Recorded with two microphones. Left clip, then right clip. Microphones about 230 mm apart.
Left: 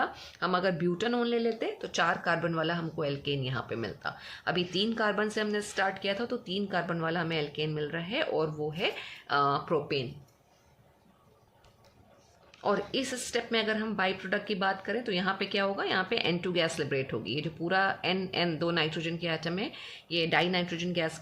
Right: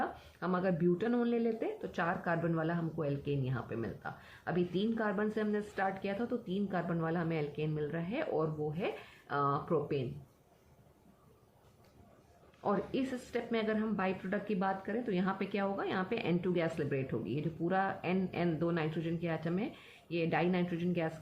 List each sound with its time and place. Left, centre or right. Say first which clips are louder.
0.0 s speech: left 6 dB; left
12.6 s speech: left 5 dB; left